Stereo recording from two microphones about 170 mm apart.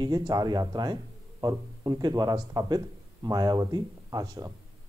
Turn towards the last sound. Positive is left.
turn(degrees=-20)  # may be behind; listen again after turning